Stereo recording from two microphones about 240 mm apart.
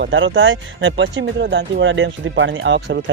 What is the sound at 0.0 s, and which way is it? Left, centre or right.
Speech, right.